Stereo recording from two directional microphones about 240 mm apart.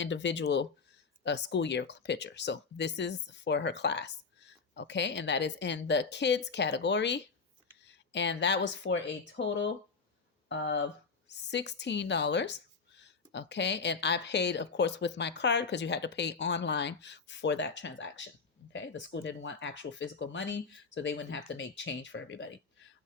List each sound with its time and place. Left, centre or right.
0.0 s speech: left